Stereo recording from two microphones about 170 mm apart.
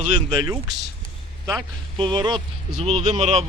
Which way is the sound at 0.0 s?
25° right (ahead or behind).